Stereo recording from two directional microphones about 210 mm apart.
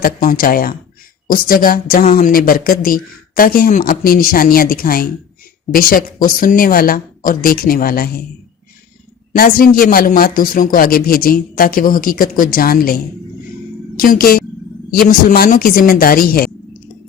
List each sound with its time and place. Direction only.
0.0 s speech: 45° left (ahead or behind)
9.3 s a woman's voice: 45° left (ahead or behind)